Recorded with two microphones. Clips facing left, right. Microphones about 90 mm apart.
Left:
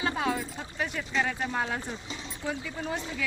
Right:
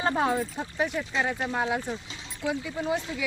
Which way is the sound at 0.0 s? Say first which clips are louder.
Right 4 dB; 35° right (ahead or behind).